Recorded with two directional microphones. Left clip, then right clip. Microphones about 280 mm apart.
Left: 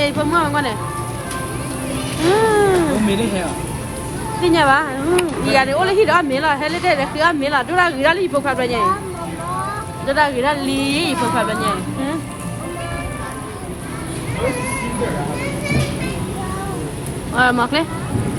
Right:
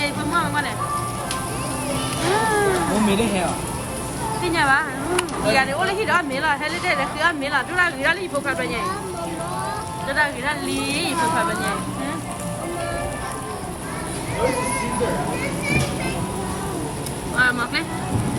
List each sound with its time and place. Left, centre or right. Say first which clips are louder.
0.0 s speech: left 5 dB; centre
2.2 s music: left 6 dB; centre
3.1 s speech: left 1 dB; right
4.4 s speech: left 5 dB; centre
10.1 s speech: left 6 dB; centre
17.3 s speech: left 5 dB; centre